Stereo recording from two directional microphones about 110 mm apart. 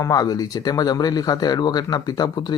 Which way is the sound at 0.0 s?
35° left (ahead or behind).